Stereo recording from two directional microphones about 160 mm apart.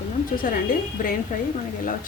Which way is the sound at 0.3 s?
65° left (ahead or behind).